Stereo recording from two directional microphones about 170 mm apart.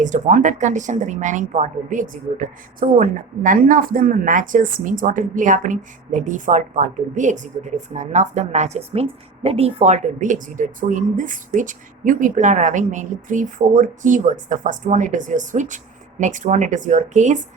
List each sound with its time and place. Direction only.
0.0 s speech: 50° right (ahead or behind)